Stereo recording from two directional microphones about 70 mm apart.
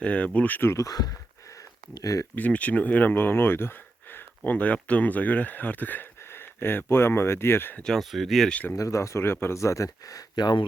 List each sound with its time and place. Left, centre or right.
0.0 s speech: centre
0.9 s a sound: left
2.3 s speech: left
7.9 s speech: centre
8.4 s speech: centre
8.7 s speech: left